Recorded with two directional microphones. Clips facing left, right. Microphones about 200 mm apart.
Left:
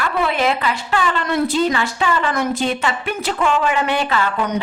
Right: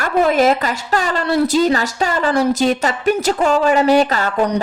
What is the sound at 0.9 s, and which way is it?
A woman's voice, 40° right (ahead or behind).